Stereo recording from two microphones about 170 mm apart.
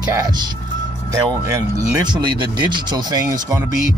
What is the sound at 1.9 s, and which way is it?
Speech, 25° right (ahead or behind).